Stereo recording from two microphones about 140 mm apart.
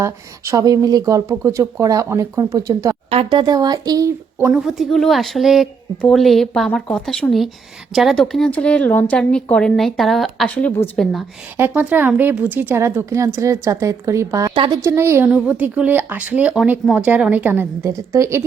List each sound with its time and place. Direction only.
0.0 s speech: 20° right (ahead or behind)
3.1 s speech: 40° right (ahead or behind)
4.4 s a woman's voice: 5° right (ahead or behind)
11.5 s speech: 15° right (ahead or behind)
14.5 s speech: 35° right (ahead or behind)
14.8 s speech: 20° right (ahead or behind)